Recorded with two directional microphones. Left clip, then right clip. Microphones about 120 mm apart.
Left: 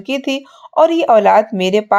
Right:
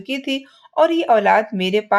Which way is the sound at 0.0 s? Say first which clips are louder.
Left 5 dB; 45° left (ahead or behind).